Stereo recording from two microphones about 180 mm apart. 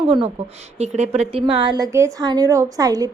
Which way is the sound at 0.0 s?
30° right (ahead or behind).